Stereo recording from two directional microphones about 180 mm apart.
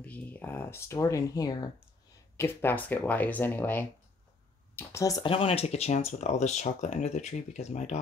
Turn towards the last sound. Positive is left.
turn(degrees=40)  # may be behind; listen again after turning